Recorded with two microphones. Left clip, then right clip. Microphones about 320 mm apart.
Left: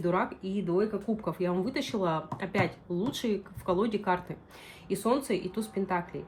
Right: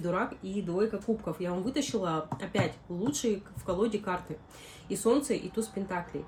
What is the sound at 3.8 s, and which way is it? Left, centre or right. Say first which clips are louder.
Speech: even; centre.